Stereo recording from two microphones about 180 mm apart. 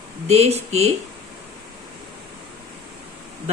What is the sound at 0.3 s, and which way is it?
Speech, 35° right (ahead or behind).